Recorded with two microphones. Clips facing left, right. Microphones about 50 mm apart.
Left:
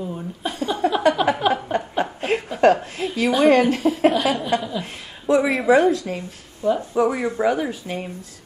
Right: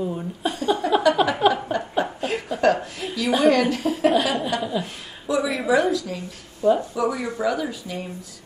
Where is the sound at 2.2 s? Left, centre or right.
Left.